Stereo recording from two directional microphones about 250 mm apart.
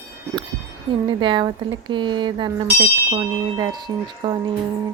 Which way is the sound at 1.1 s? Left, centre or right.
Centre.